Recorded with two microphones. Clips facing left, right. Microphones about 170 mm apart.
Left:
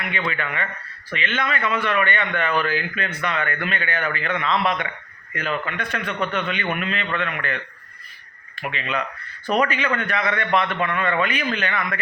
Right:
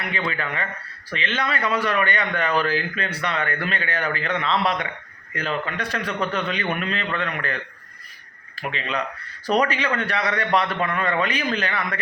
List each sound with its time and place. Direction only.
0.1 s speech: 35° right (ahead or behind)